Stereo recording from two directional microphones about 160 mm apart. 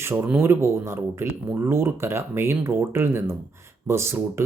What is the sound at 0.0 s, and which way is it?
Speech, 15° right (ahead or behind).